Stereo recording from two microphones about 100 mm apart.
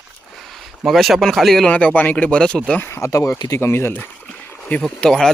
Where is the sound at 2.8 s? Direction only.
25° left (ahead or behind).